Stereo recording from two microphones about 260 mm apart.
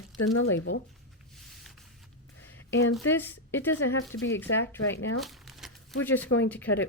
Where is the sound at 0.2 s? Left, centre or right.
Left.